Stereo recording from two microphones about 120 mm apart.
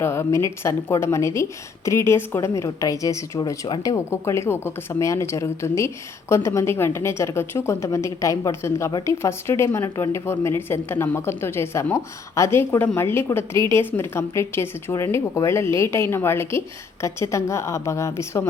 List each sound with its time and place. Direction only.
0.0 s a woman's voice: 20° left (ahead or behind)